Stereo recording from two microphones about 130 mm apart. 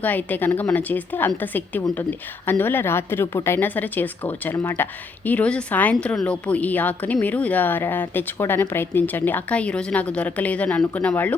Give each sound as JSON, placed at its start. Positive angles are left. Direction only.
{"t": 0.0, "sound": "a woman's voice", "side_deg": 15}
{"t": 4.5, "sound": "speech", "side_deg": 30}
{"t": 4.8, "sound": "a woman's voice", "side_deg": 10}